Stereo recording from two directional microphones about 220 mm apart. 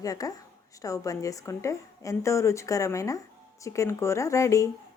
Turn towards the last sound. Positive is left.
turn(degrees=15)  # may be behind; listen again after turning